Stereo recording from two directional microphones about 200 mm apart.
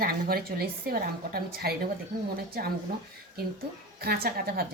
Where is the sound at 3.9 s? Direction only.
50° right (ahead or behind).